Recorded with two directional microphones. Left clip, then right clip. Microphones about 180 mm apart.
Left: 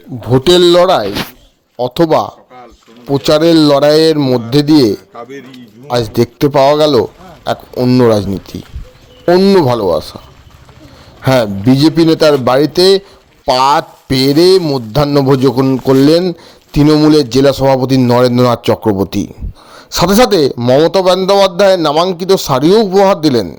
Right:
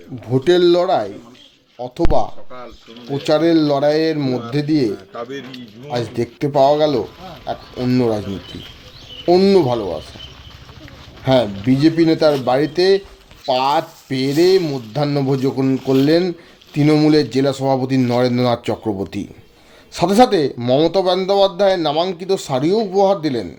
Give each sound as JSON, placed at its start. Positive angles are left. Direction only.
{"t": 0.3, "sound": "a man's voice", "side_deg": 40}
{"t": 7.8, "sound": "speech", "side_deg": 30}
{"t": 9.2, "sound": "speech", "side_deg": 30}
{"t": 9.6, "sound": "a man's voice", "side_deg": 40}
{"t": 11.2, "sound": "speech", "side_deg": 45}
{"t": 20.6, "sound": "speech", "side_deg": 30}